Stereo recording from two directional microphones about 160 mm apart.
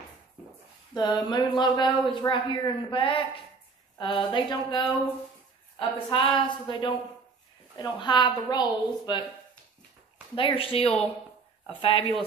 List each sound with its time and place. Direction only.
0.9 s a woman's voice: 25° left (ahead or behind)
10.3 s a woman's voice: 35° left (ahead or behind)